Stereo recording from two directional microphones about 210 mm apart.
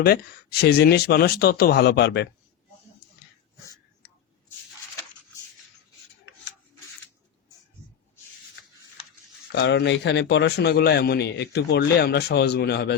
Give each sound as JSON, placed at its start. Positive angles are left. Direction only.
{"t": 0.6, "sound": "a man's voice", "side_deg": 50}
{"t": 9.6, "sound": "a man's voice", "side_deg": 55}